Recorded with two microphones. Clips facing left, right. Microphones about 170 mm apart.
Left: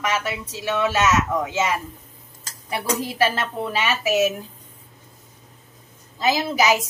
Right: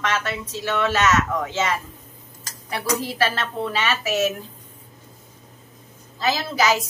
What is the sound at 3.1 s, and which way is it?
A woman's voice, 15° left (ahead or behind).